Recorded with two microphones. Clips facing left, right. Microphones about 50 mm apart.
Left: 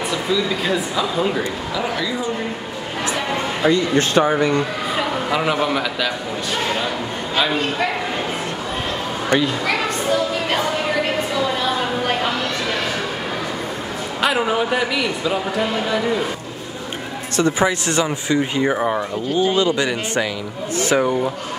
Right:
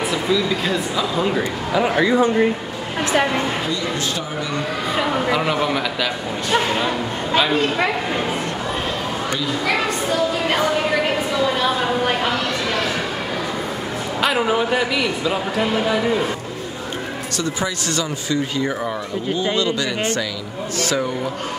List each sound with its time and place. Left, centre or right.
0.1 s a man's voice: centre
1.4 s speech: right
3.6 s speech: left
5.3 s a man's voice: centre
14.2 s a man's voice: centre
17.4 s speech: left